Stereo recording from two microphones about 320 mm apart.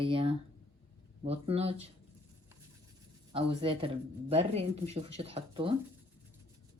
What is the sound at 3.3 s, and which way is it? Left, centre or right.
Speech, centre.